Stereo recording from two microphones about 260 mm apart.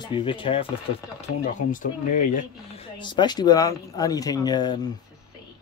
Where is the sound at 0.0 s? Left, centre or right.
Centre.